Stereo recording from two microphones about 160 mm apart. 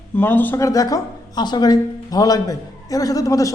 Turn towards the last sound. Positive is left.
turn(degrees=20)  # may be behind; listen again after turning